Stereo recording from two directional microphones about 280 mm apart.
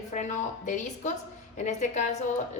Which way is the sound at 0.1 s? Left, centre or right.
Left.